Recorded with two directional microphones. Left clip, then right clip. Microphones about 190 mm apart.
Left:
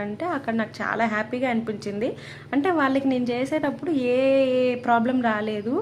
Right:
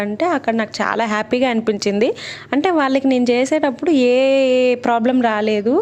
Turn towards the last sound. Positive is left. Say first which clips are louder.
# right 9 dB
turn(degrees=-35)  # may be behind; listen again after turning